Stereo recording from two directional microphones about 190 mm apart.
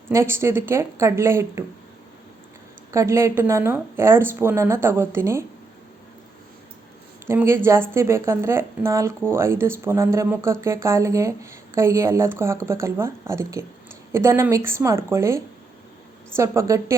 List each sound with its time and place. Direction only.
0.1 s speech: 15° right (ahead or behind)
2.9 s speech: 15° right (ahead or behind)
7.3 s speech: 15° right (ahead or behind)